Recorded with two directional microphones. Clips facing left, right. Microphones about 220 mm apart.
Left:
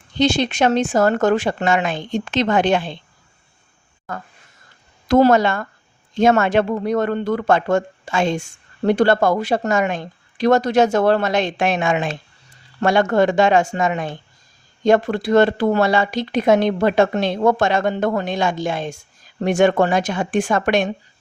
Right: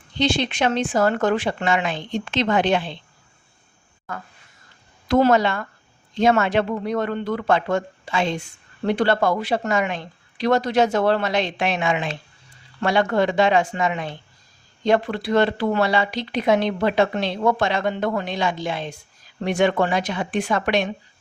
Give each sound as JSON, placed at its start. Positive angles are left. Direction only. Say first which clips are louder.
{"t": 0.2, "sound": "speech", "louder": "left 4 dB", "side_deg": 45}
{"t": 5.0, "sound": "speech", "louder": "left 3 dB", "side_deg": 45}